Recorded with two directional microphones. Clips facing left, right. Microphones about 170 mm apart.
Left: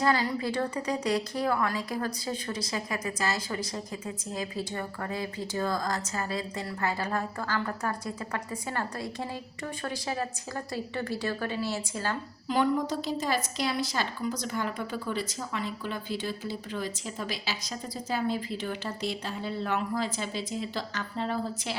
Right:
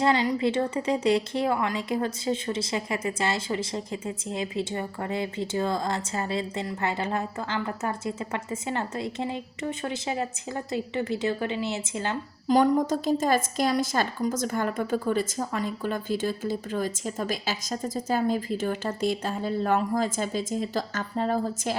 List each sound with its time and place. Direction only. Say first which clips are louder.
0.0 s a woman's voice: right 4 dB; 20° right (ahead or behind)
12.5 s a woman's voice: right 5 dB; 45° right (ahead or behind)